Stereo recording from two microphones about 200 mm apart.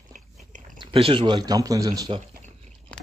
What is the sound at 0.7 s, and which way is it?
Speech, 25° right (ahead or behind).